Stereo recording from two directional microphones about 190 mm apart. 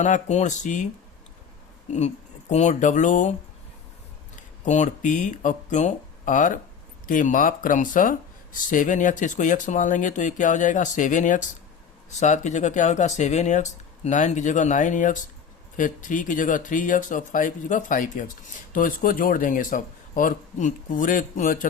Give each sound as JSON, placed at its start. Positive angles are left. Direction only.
{"t": 0.0, "sound": "speech", "side_deg": 40}
{"t": 1.9, "sound": "speech", "side_deg": 35}
{"t": 4.4, "sound": "speech", "side_deg": 40}